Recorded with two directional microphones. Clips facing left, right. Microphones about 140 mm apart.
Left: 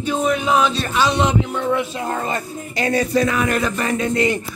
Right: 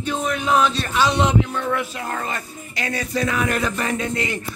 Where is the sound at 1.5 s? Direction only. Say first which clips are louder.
Left 4 dB; 20° left (ahead or behind); by 4.2 s 45° left (ahead or behind).